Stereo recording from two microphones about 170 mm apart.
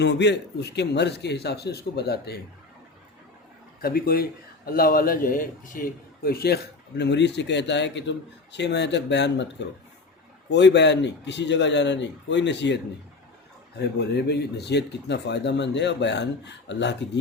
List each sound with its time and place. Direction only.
0.0 s speech: 90° left; by 2.4 s 70° left (ahead or behind)
3.8 s speech: 60° left (ahead or behind); by 12.8 s 90° left
13.8 s speech: 75° left (ahead or behind)